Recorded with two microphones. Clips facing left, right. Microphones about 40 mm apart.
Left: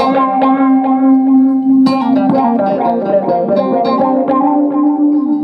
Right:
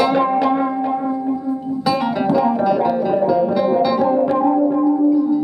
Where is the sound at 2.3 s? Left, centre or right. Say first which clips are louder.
Left 4 dB; centre.